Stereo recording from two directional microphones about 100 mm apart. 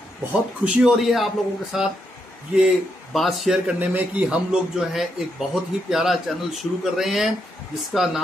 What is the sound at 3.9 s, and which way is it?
A man's voice, 15° right (ahead or behind).